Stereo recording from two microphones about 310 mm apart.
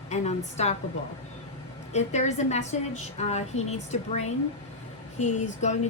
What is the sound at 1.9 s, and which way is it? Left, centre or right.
A woman's voice, left.